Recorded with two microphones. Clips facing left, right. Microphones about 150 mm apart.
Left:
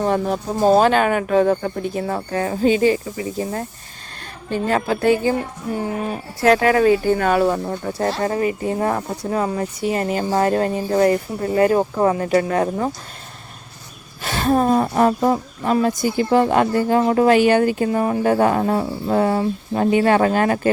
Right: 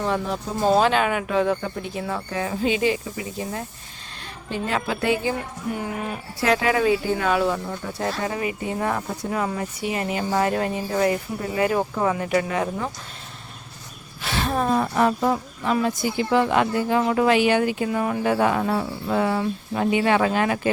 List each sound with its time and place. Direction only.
0.0 s speech: 45° left (ahead or behind)
14.2 s speech: 45° left (ahead or behind)